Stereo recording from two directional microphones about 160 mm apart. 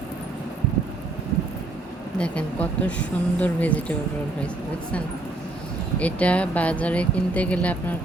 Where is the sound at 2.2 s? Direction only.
5° left (ahead or behind).